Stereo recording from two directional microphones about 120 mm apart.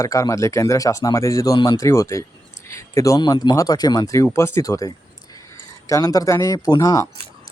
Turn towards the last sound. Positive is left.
turn(degrees=25)  # may be behind; listen again after turning